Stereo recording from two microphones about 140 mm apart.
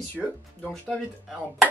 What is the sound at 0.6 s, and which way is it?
Speech, centre (ahead or behind).